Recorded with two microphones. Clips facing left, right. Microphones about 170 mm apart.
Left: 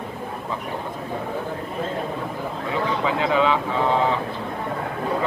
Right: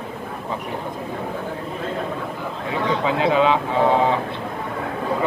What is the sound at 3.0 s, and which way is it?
Speech, 20° right (ahead or behind).